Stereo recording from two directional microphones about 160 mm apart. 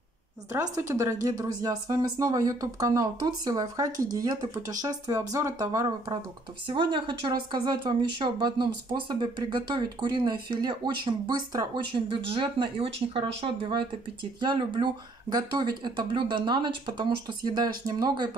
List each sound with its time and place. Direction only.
0.5 s speech: 20° right (ahead or behind)